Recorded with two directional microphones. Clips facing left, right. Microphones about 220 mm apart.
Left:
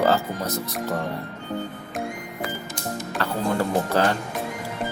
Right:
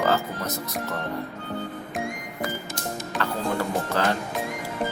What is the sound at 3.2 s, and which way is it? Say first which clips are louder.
Music: left 1 dB; 35° left (ahead or behind).